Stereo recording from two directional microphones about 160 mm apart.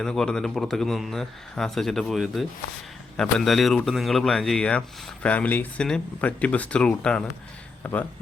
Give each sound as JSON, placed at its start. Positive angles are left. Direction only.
{"t": 0.0, "sound": "speech", "side_deg": 5}